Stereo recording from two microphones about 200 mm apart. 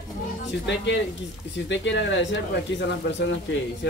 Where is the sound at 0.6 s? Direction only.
60° left (ahead or behind).